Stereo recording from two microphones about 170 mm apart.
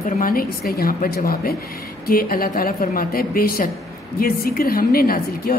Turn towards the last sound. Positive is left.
turn(degrees=60)  # may be behind; listen again after turning